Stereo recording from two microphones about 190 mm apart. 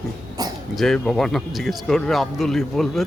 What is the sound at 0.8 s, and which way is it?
Speech, 5° left (ahead or behind).